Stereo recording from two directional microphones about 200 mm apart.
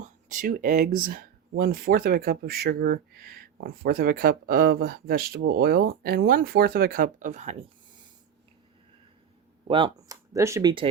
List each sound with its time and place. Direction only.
0.0 s speech: 40° right (ahead or behind)
9.6 s speech: 25° right (ahead or behind)